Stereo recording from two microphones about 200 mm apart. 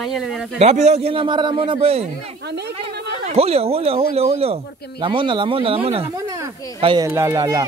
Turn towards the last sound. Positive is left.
turn(degrees=-15)  # may be behind; listen again after turning